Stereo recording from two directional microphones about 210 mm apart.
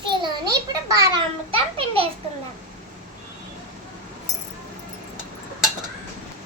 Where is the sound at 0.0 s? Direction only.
20° right (ahead or behind).